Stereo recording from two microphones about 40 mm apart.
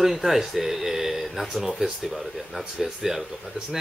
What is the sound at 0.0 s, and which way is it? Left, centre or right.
Speech, centre.